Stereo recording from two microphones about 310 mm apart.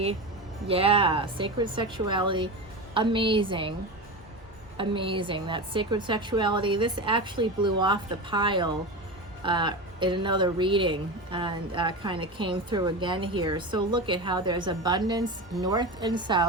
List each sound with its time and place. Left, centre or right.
0.7 s speech: centre
4.8 s speech: centre